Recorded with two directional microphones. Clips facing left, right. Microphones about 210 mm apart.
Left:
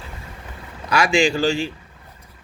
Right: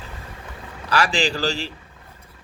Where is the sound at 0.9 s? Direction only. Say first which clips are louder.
Left 4 dB; 35° right (ahead or behind).